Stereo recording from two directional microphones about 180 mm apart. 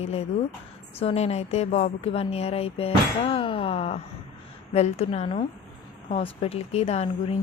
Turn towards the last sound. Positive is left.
turn(degrees=35)  # may be behind; listen again after turning